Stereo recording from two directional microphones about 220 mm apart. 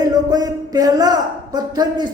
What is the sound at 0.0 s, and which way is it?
Speech, 15° right (ahead or behind).